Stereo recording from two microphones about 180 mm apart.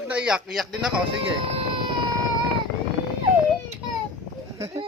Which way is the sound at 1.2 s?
30° right (ahead or behind).